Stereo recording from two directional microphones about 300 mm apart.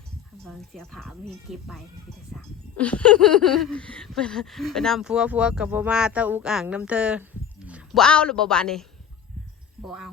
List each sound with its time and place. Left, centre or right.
0.4 s speech: centre
9.8 s speech: centre